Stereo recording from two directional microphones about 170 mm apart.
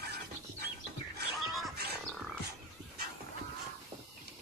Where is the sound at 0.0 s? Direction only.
70° right (ahead or behind).